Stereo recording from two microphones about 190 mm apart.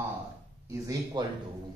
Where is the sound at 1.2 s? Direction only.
20° right (ahead or behind).